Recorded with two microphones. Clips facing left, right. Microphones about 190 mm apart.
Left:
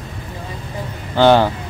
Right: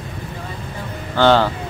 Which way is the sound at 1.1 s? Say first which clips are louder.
Left 2 dB; 15° left (ahead or behind).